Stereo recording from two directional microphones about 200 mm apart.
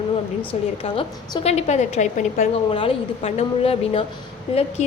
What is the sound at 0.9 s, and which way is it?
A woman's voice, 30° left (ahead or behind).